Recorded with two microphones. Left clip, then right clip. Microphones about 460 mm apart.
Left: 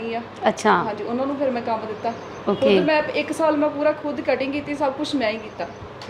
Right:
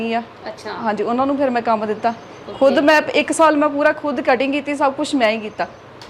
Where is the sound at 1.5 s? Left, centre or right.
Right.